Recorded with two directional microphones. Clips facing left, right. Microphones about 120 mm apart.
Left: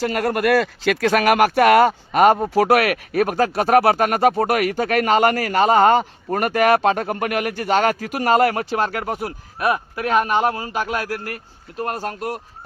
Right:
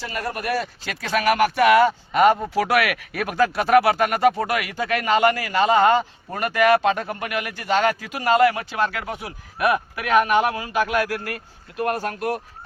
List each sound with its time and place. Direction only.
0.0 s speech: 65° left (ahead or behind); by 9.3 s 45° left (ahead or behind)
9.6 s speech: 30° left (ahead or behind)